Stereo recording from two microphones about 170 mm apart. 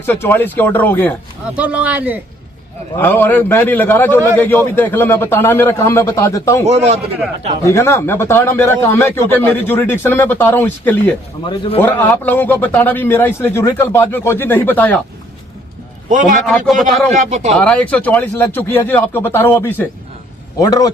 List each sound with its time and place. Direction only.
0.0 s a man's voice: 10° left (ahead or behind)
1.5 s speech: 10° right (ahead or behind)
3.0 s a man's voice: 10° left (ahead or behind)
6.7 s a man's voice: 40° right (ahead or behind)
7.6 s a man's voice: 15° left (ahead or behind)
11.4 s a man's voice: 30° left (ahead or behind)
11.8 s a man's voice: 10° left (ahead or behind)
16.0 s a man's voice: 50° right (ahead or behind)
17.6 s a man's voice: 5° left (ahead or behind)